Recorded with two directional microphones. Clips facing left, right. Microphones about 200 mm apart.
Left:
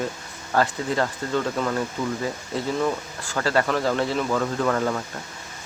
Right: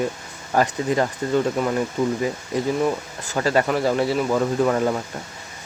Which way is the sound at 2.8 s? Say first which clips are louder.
Right 3 dB; 15° right (ahead or behind).